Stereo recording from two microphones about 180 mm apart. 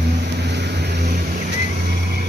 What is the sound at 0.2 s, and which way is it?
Vehicle, 70° right (ahead or behind).